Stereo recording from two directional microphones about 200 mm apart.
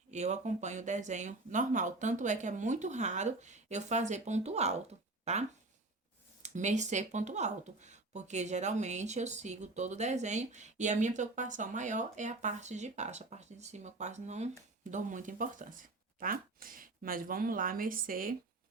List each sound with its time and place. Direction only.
0.1 s speech: 35° right (ahead or behind)